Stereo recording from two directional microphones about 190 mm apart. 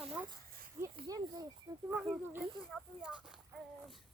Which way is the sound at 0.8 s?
20° right (ahead or behind).